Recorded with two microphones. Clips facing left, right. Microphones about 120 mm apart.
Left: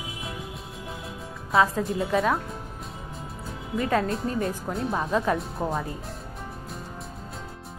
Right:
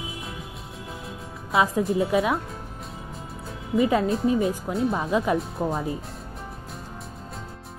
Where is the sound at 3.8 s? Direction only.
5° right (ahead or behind).